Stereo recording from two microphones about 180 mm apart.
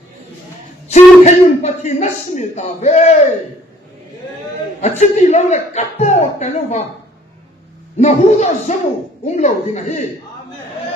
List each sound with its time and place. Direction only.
0.9 s a man's voice: 40° left (ahead or behind)
4.8 s a man's voice: 40° left (ahead or behind)
7.9 s a man's voice: 40° left (ahead or behind)